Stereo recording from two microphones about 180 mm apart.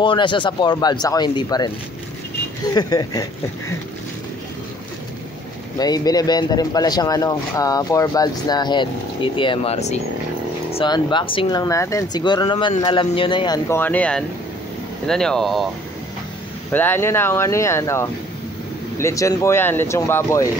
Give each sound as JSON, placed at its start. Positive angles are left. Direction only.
{"t": 0.0, "sound": "speech", "side_deg": 25}
{"t": 2.7, "sound": "speech", "side_deg": 20}
{"t": 5.8, "sound": "speech", "side_deg": 20}
{"t": 13.7, "sound": "speech", "side_deg": 10}
{"t": 16.7, "sound": "speech", "side_deg": 10}